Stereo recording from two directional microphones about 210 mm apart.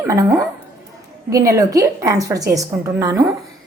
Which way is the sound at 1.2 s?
15° right (ahead or behind).